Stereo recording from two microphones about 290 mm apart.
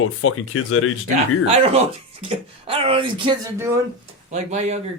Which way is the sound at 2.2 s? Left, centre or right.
Centre.